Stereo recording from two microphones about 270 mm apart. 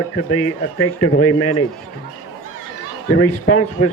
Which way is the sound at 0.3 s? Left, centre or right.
Left.